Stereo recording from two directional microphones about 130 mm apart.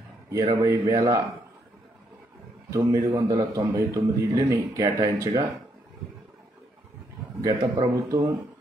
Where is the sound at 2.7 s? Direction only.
25° right (ahead or behind).